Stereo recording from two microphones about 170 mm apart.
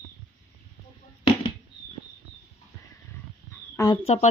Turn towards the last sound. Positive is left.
turn(degrees=40)  # may be behind; listen again after turning